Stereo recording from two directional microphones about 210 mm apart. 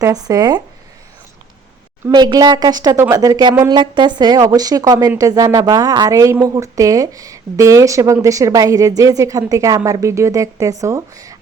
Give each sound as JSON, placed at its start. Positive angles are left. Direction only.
{"t": 0.0, "sound": "speech", "side_deg": -15}
{"t": 2.0, "sound": "speech", "side_deg": -20}